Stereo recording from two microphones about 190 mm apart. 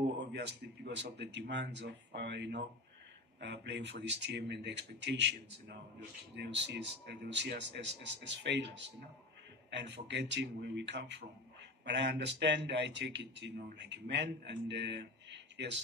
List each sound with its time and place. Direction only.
0.3 s a man's voice: 65° right (ahead or behind)
9.7 s speech: 65° right (ahead or behind)